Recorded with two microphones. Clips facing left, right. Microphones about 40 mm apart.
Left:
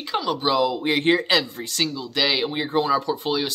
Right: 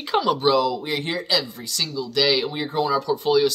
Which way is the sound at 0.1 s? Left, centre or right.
Centre.